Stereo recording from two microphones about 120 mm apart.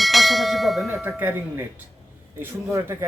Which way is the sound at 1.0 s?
15° right (ahead or behind).